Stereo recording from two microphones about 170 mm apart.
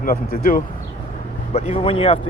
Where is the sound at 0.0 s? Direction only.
55° left (ahead or behind).